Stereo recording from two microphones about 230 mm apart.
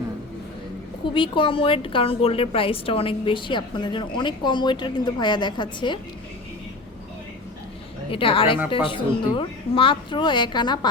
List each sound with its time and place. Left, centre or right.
1.1 s a woman's voice: left
8.1 s a woman's voice: left